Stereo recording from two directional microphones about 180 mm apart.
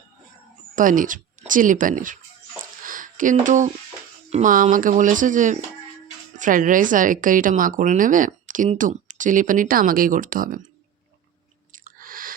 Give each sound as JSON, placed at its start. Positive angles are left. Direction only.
{"t": 0.8, "sound": "speech", "side_deg": -50}
{"t": 2.8, "sound": "a sound", "side_deg": -50}
{"t": 4.3, "sound": "a woman's voice", "side_deg": -40}
{"t": 11.7, "sound": "chewing", "side_deg": -50}